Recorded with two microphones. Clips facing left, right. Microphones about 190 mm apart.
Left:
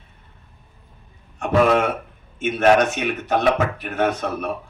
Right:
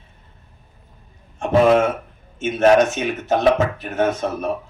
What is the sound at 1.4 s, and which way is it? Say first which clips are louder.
Speech: right 3 dB; 25° right (ahead or behind).